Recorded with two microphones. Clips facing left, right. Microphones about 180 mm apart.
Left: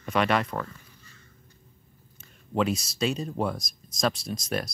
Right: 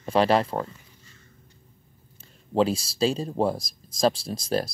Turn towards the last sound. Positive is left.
turn(degrees=-30)  # may be behind; listen again after turning